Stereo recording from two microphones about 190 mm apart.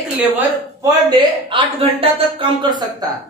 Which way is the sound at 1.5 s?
30° right (ahead or behind).